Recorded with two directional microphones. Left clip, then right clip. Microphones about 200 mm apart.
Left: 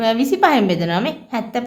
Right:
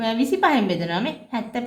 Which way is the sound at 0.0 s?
25° left (ahead or behind).